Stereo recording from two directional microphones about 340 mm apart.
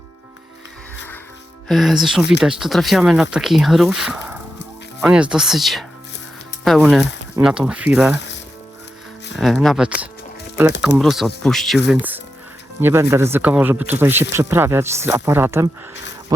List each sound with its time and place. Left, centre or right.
1.6 s speech: centre
9.4 s speech: centre
12.8 s speech: centre